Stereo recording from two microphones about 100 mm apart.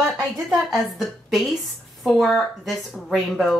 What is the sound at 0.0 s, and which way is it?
A woman's voice, centre (ahead or behind).